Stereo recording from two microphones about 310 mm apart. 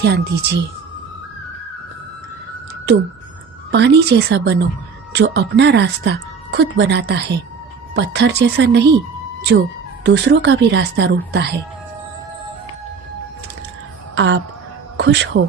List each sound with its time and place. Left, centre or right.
0.0 s speech: right
3.7 s speech: right
10.0 s speech: right
14.2 s speech: right